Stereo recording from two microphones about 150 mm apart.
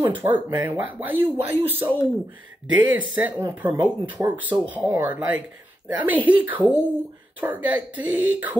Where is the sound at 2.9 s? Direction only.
10° right (ahead or behind).